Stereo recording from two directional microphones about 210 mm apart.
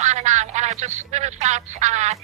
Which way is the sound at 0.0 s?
35° right (ahead or behind).